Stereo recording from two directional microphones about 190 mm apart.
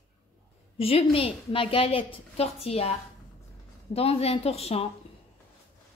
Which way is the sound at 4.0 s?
30° left (ahead or behind).